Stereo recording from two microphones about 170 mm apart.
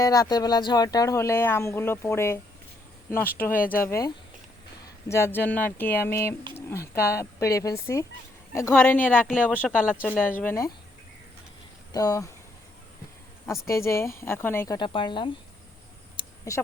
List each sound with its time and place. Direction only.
0.0 s speech: 20° left (ahead or behind)
9.3 s speech: 10° right (ahead or behind)
10.4 s speech: 15° left (ahead or behind)
11.9 s speech: 20° left (ahead or behind)
13.5 s speech: 15° left (ahead or behind)
14.8 s speech: 30° left (ahead or behind)
16.5 s speech: 20° left (ahead or behind)